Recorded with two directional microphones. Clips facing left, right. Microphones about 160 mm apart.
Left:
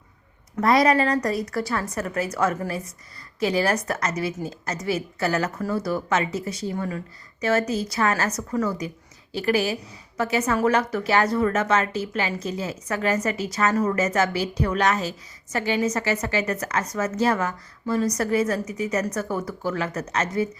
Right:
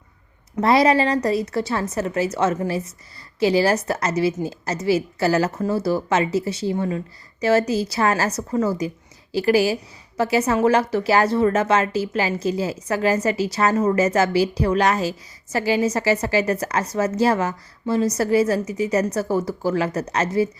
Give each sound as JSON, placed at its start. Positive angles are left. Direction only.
{"t": 0.5, "sound": "a woman's voice", "side_deg": -30}